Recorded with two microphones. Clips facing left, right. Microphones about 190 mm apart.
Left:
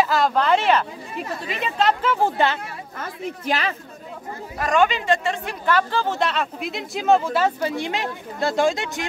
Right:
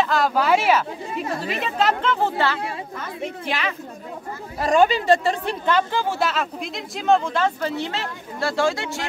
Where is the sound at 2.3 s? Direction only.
20° left (ahead or behind).